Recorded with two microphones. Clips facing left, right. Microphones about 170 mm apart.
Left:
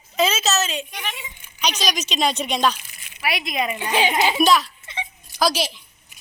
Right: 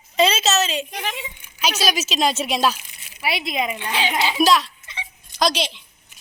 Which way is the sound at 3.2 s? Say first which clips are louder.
Right 1 dB; 25° right (ahead or behind).